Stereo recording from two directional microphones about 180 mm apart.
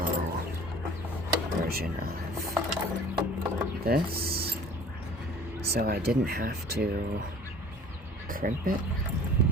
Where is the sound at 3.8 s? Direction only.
60° right (ahead or behind).